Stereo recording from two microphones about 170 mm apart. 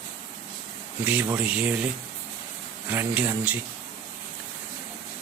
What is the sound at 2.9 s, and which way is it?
Speech, 10° right (ahead or behind).